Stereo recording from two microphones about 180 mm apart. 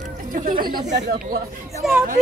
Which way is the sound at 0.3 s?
50° right (ahead or behind).